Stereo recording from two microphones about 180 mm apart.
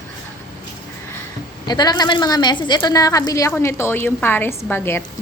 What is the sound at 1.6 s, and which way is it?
A woman's voice, 20° left (ahead or behind).